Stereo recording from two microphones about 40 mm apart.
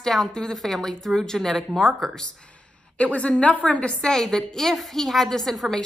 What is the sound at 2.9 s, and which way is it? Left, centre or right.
A woman's voice, left.